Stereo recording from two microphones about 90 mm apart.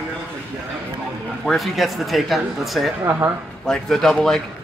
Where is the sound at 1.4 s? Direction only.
Centre (ahead or behind).